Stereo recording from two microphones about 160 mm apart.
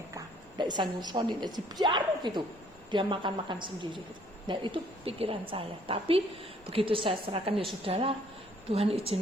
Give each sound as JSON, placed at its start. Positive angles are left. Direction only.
{"t": 0.6, "sound": "a woman's voice", "side_deg": -25}